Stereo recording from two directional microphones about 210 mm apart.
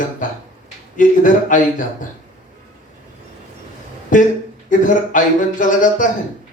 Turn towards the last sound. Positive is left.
turn(degrees=40)  # may be behind; listen again after turning